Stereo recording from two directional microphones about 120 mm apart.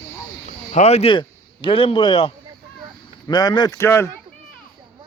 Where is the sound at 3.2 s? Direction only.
35° left (ahead or behind).